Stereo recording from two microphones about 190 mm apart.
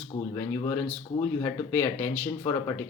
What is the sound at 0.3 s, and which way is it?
Speech, 15° left (ahead or behind).